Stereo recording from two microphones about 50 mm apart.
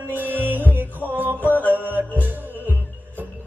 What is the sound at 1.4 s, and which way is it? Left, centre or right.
Music, left.